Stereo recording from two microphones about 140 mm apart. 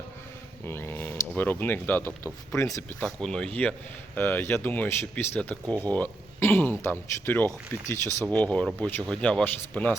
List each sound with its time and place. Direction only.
0.6 s speech: 15° left (ahead or behind)
3.0 s speech: 5° left (ahead or behind)